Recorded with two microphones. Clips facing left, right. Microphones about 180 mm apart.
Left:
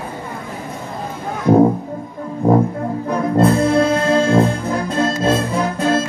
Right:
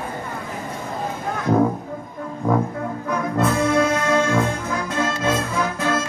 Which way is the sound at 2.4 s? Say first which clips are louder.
Left 6 dB; 30° left (ahead or behind).